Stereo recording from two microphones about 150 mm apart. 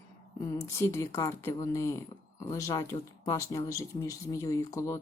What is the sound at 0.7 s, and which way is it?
Speech, 20° left (ahead or behind).